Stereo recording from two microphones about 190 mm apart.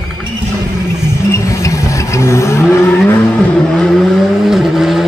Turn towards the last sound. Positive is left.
turn(degrees=0)  # may be behind; listen again after turning